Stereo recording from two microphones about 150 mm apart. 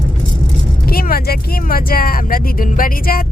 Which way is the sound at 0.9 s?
85° left.